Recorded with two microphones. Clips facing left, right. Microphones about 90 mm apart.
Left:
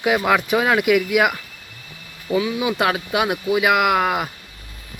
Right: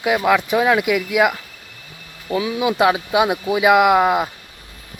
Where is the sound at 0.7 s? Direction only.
15° right (ahead or behind).